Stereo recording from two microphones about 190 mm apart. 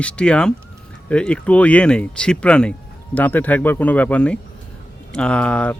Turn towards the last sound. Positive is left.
turn(degrees=5)  # may be behind; listen again after turning